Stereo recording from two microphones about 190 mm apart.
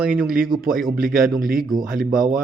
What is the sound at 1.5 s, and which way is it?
Speech, centre (ahead or behind).